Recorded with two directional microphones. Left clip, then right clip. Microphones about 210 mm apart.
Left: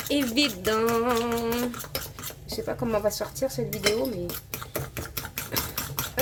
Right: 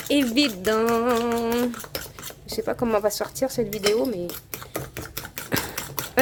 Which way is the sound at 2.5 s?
45° right (ahead or behind).